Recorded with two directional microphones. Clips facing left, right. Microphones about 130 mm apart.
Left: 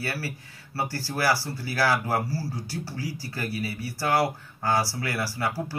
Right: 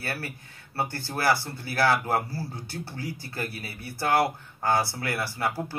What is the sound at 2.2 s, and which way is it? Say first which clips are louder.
Speech: left 4 dB; 55° right (ahead or behind).